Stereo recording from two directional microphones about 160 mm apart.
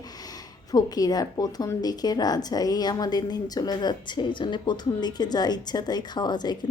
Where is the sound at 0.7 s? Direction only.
25° left (ahead or behind).